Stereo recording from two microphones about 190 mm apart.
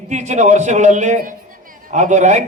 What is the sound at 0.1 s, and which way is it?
A man's voice, 40° right (ahead or behind).